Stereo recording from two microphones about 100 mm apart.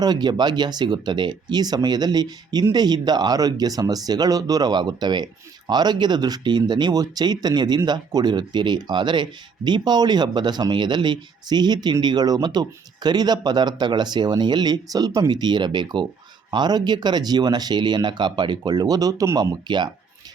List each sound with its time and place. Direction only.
0.0 s speech: 45° right (ahead or behind)
19.6 s speech: 45° right (ahead or behind)